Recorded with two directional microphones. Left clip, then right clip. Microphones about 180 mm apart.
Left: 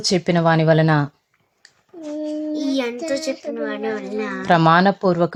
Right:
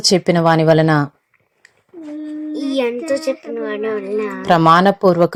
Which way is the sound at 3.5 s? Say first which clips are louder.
Right 4 dB; 30° right (ahead or behind).